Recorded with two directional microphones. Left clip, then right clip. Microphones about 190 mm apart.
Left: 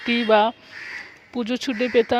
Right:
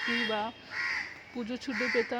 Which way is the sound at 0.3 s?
45° left (ahead or behind).